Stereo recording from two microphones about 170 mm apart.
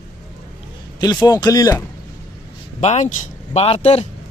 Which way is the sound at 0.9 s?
25° left (ahead or behind).